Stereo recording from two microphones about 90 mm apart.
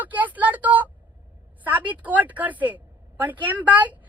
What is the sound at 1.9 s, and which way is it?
A woman's voice, 20° right (ahead or behind).